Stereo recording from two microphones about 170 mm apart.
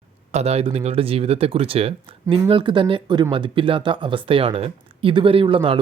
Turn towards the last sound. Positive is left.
turn(degrees=-30)  # may be behind; listen again after turning